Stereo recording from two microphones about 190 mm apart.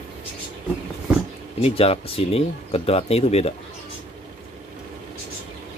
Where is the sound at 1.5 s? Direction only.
30° left (ahead or behind).